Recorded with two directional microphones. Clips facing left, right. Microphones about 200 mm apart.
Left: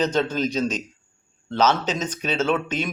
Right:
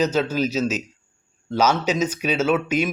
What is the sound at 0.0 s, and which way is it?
Speech, 5° right (ahead or behind).